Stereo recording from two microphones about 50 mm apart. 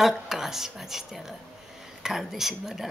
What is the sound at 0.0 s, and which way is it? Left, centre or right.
A woman's voice, centre.